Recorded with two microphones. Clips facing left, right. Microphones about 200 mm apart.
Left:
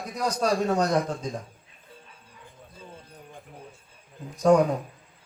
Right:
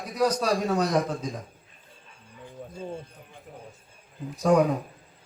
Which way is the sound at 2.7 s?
55° right (ahead or behind).